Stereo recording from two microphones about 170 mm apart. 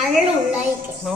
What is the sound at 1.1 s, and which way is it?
Speech, centre (ahead or behind).